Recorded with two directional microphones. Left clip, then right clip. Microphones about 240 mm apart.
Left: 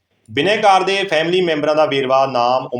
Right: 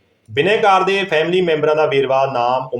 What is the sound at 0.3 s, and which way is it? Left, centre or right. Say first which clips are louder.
Speech: even; centre.